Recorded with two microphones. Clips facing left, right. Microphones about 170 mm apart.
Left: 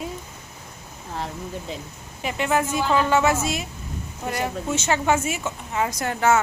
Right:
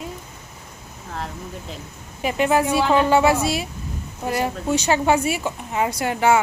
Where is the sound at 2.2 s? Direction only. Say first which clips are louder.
Right 4 dB; 15° right (ahead or behind).